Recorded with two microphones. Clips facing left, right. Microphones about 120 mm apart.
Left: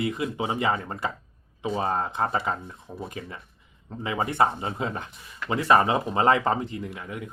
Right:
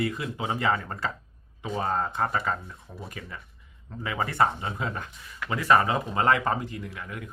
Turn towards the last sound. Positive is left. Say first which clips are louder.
# left 3 dB
turn(degrees=20)  # may be behind; listen again after turning